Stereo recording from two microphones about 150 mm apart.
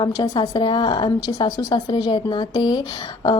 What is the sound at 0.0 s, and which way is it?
A woman's voice, 30° left (ahead or behind).